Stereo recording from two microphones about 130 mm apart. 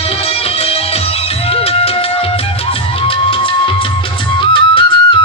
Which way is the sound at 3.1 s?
45° left (ahead or behind).